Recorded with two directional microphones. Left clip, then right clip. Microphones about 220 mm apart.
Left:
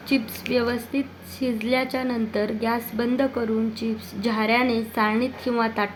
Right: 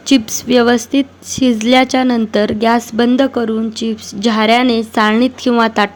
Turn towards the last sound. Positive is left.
turn(degrees=-35)  # may be behind; listen again after turning